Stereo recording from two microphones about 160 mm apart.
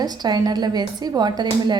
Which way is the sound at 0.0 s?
25° right (ahead or behind).